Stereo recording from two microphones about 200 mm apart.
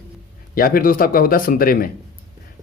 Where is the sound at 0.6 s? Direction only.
45° left (ahead or behind).